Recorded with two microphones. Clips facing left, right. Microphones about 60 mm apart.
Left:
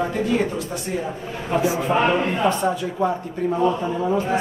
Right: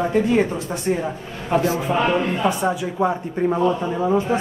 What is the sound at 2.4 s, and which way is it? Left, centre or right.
A man's voice, centre.